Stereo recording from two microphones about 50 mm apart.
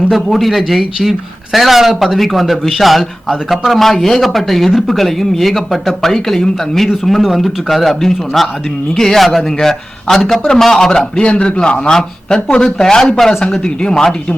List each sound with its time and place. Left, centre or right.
0.1 s a man's voice: centre